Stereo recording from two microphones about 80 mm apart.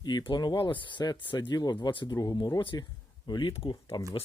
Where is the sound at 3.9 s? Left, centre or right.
Left.